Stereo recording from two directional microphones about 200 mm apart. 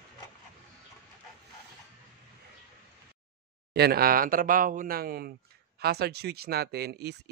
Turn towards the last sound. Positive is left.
turn(degrees=-55)  # may be behind; listen again after turning